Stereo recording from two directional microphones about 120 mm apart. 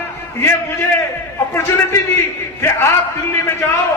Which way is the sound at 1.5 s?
20° left (ahead or behind).